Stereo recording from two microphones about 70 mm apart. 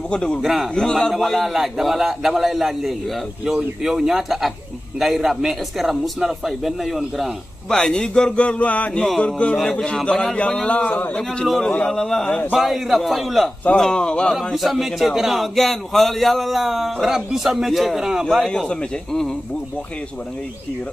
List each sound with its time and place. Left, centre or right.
0.1 s speech: centre
0.4 s a man's voice: centre
7.7 s a man's voice: centre
11.4 s a man's voice: centre
11.7 s speech: centre
12.5 s a man's voice: centre
13.7 s speech: centre
14.5 s a man's voice: centre
18.2 s speech: centre